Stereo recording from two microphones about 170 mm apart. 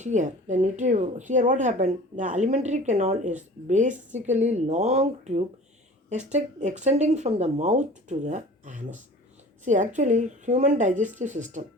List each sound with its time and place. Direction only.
0.0 s speech: 45° right (ahead or behind)